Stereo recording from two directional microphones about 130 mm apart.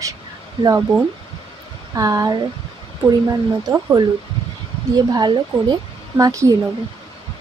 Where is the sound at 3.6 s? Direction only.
30° right (ahead or behind).